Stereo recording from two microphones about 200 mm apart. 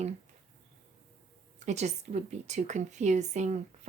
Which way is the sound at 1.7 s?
35° right (ahead or behind).